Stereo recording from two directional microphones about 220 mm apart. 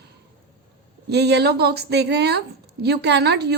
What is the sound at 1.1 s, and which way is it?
A woman's voice, 50° right (ahead or behind).